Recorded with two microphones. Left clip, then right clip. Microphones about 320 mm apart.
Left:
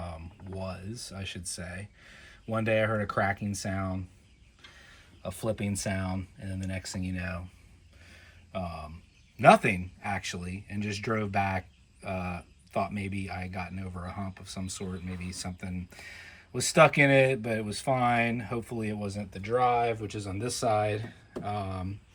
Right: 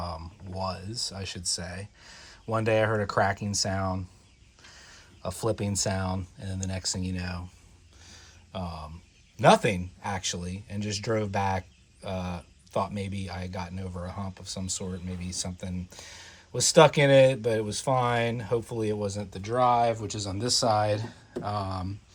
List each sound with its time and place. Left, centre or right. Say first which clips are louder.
0.7 s speech: right 7 dB; centre
8.5 s a sound: left 1 dB; right
9.4 s speech: even; centre